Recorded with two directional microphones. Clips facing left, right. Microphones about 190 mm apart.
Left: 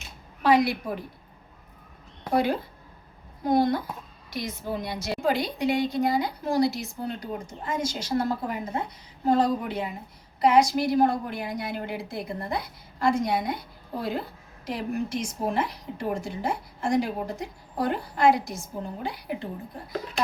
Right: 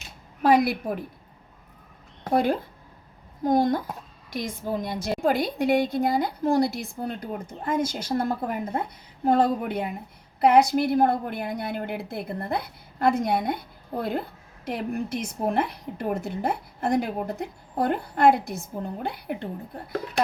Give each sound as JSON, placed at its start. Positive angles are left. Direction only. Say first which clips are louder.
{"t": 0.4, "sound": "a woman's voice", "louder": "right 1 dB", "side_deg": -50}
{"t": 2.3, "sound": "a woman's voice", "louder": "right 2 dB", "side_deg": -50}